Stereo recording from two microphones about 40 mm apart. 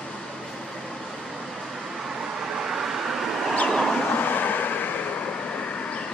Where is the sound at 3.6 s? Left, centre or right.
Centre.